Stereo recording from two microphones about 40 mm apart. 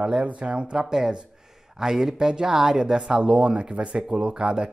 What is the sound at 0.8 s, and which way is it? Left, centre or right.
Speech, centre.